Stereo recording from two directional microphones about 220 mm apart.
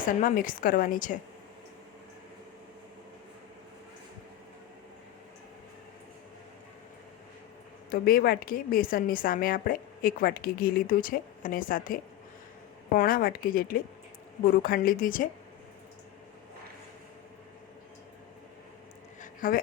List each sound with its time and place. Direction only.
0.2 s a woman's voice: 40° left (ahead or behind)
7.9 s a woman's voice: 40° left (ahead or behind)
19.2 s a sound: 40° left (ahead or behind)